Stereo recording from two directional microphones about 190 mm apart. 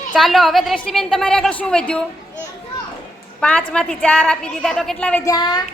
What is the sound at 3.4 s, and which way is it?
A woman's voice, 5° left (ahead or behind).